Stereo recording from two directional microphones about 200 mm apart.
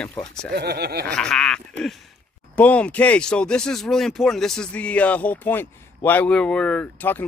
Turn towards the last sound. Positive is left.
turn(degrees=10)  # may be behind; listen again after turning